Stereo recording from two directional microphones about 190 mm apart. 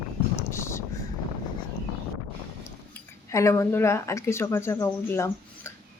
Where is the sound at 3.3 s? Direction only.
15° left (ahead or behind).